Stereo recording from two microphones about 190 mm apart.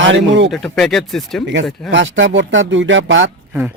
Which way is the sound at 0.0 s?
75° right (ahead or behind).